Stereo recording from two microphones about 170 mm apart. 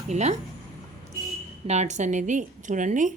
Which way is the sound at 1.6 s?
40° right (ahead or behind).